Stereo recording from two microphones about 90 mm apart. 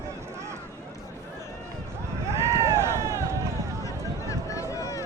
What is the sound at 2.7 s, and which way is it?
Run, 30° right (ahead or behind).